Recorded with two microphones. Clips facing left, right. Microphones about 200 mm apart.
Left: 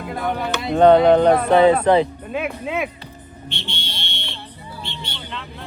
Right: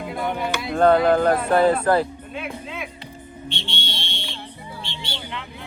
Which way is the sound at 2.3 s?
60° left (ahead or behind).